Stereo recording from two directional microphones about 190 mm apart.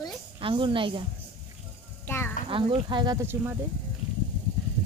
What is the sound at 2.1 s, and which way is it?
Speech, 10° left (ahead or behind).